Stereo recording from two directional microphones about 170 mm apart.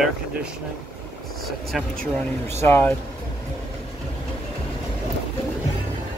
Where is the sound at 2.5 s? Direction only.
15° left (ahead or behind).